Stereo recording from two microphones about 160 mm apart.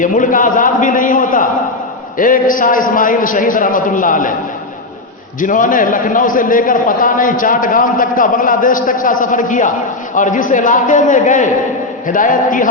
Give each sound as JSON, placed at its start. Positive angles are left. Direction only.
{"t": 0.0, "sound": "a man's voice", "side_deg": 55}
{"t": 5.4, "sound": "a man's voice", "side_deg": 55}